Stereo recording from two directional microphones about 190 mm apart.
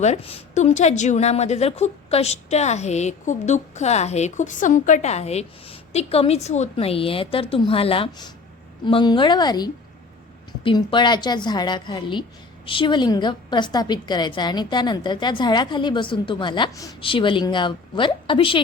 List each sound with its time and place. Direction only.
0.0 s a woman's voice: 35° left (ahead or behind)